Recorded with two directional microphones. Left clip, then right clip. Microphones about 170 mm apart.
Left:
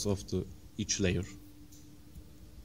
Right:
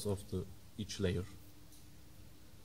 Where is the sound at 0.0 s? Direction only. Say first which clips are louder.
Left 6 dB; 30° left (ahead or behind).